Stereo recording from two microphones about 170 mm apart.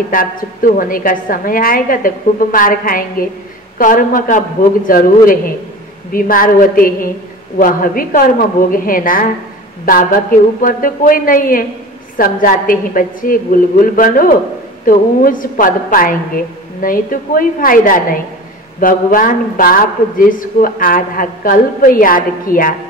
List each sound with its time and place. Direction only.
0.1 s a man's voice: 55° left (ahead or behind)